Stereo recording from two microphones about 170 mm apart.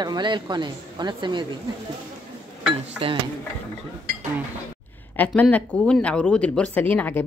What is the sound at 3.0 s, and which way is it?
Dishes, 35° right (ahead or behind).